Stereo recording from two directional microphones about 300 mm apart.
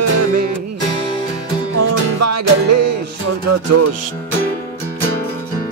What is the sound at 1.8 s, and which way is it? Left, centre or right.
Music, right.